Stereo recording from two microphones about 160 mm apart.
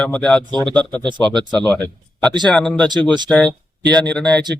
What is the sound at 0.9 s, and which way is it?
Speech, 30° right (ahead or behind).